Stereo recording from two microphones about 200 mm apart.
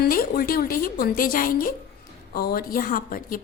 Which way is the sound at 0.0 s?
50° left (ahead or behind).